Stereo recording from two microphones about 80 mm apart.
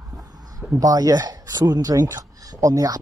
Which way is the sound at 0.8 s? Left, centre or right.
Right.